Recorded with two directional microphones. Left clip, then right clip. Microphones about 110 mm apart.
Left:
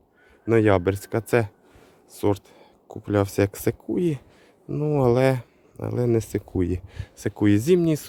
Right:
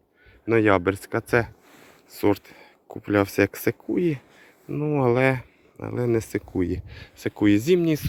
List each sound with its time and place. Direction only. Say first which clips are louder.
0.4 s speech: even; 40° left (ahead or behind)
2.1 s speech: right 2 dB; 10° left (ahead or behind); by 4.2 s 30° left (ahead or behind)
4.7 s speech: left 1 dB; 50° left (ahead or behind); by 8.0 s 35° left (ahead or behind)